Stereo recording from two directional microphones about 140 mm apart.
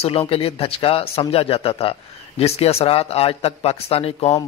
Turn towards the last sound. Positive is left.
turn(degrees=50)  # may be behind; listen again after turning